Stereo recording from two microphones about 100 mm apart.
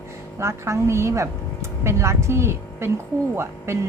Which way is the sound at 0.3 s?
30° right (ahead or behind).